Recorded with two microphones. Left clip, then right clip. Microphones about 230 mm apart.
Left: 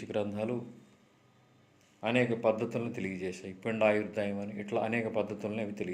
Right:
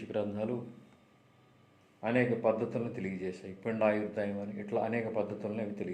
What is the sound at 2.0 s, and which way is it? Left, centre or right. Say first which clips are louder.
A man's voice: left 1 dB; left.